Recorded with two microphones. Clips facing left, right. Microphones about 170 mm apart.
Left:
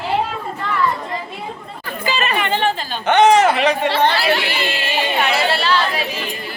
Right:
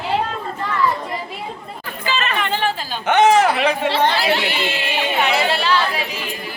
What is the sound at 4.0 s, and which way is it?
Chatter, 10° right (ahead or behind).